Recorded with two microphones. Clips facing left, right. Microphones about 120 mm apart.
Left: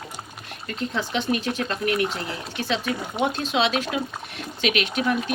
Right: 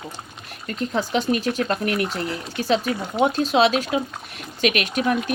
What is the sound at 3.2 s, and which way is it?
Speech, 40° right (ahead or behind).